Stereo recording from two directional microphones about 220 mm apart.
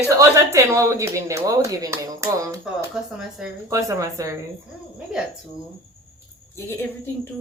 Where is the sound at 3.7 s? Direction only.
15° right (ahead or behind).